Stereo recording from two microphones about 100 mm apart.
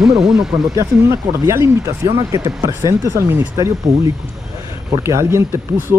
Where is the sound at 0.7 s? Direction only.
30° right (ahead or behind).